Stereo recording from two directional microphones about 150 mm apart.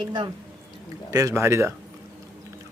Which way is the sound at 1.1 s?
20° right (ahead or behind).